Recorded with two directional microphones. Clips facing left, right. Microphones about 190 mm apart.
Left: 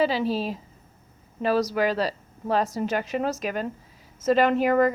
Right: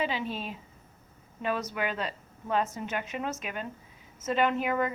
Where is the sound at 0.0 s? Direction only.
35° left (ahead or behind).